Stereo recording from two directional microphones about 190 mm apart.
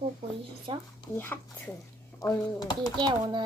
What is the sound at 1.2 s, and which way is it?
Speech, 10° left (ahead or behind).